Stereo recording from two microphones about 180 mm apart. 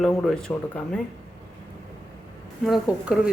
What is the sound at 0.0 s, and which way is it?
Speech, centre (ahead or behind).